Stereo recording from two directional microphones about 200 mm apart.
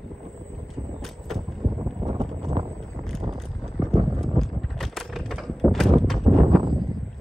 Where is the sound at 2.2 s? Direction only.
30° right (ahead or behind).